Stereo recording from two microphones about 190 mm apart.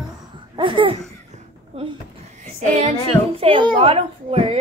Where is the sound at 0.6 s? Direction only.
25° right (ahead or behind).